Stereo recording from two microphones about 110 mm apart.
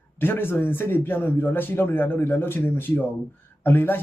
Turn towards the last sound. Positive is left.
turn(degrees=20)  # may be behind; listen again after turning